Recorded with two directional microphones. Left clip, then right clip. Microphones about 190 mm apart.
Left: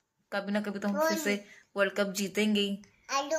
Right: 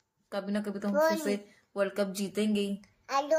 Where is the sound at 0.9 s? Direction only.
65° right (ahead or behind).